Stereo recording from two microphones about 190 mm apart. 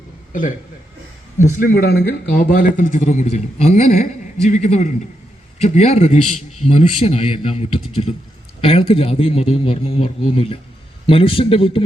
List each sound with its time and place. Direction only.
1.4 s a man's voice: 50° left (ahead or behind); by 11.8 s 30° left (ahead or behind)